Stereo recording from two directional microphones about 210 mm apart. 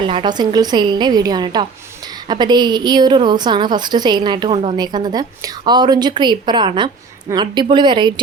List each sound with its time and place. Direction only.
0.0 s a woman's voice: 20° right (ahead or behind)